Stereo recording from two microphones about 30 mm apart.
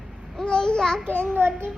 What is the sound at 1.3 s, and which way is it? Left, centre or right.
Speech, right.